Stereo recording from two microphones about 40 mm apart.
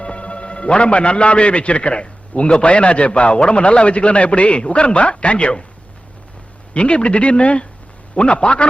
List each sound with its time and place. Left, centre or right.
0.0 s a man's voice: left
6.7 s a man's voice: left